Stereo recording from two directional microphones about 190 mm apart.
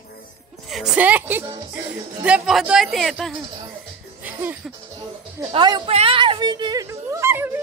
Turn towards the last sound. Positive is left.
turn(degrees=-10)  # may be behind; listen again after turning